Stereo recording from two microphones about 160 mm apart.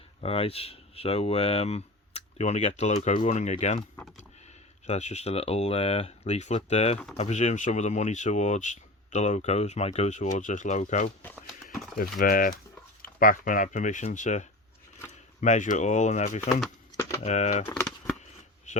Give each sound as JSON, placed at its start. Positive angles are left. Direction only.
{"t": 0.2, "sound": "speech", "side_deg": 35}
{"t": 4.9, "sound": "speech", "side_deg": 45}
{"t": 11.2, "sound": "speech", "side_deg": 10}
{"t": 12.2, "sound": "speech", "side_deg": 60}